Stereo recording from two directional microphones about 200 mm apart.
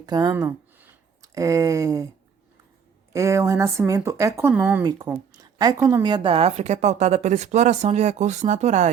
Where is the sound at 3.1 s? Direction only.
15° right (ahead or behind).